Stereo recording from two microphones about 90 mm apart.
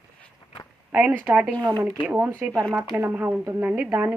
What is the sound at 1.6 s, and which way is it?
Speech, 50° right (ahead or behind).